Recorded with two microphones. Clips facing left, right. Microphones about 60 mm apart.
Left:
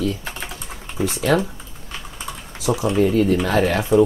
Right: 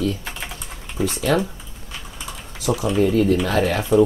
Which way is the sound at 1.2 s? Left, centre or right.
Centre.